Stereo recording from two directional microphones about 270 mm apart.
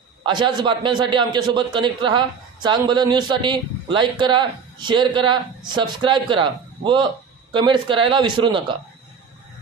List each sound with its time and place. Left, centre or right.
0.2 s a man's voice: centre